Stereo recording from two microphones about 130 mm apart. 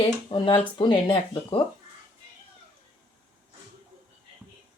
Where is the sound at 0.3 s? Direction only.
40° left (ahead or behind).